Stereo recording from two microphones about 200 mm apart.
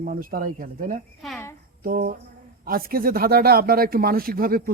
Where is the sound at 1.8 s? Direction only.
45° right (ahead or behind).